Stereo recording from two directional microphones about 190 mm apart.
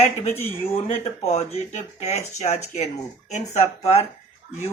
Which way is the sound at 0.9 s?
35° left (ahead or behind).